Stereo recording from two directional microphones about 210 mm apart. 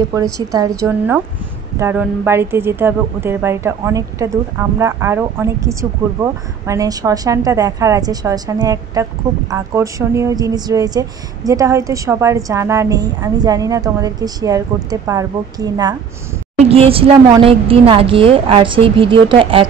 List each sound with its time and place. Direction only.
0.1 s a woman's voice: 15° right (ahead or behind)
6.6 s a woman's voice: 15° right (ahead or behind)
16.5 s a woman's voice: 30° right (ahead or behind)